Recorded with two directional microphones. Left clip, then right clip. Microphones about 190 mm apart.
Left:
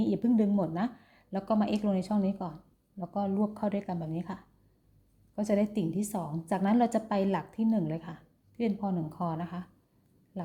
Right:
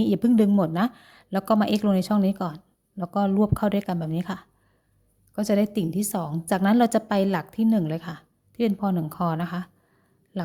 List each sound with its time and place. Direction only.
0.0 s a woman's voice: 30° right (ahead or behind)